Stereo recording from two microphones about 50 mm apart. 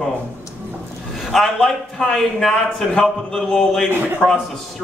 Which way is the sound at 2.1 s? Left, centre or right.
Centre.